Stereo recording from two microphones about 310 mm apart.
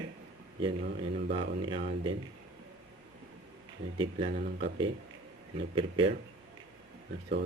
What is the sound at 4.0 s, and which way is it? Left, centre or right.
Speech, centre.